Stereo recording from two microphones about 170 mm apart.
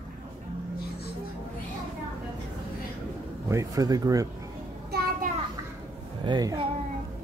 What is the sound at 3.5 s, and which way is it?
Speech, 20° right (ahead or behind).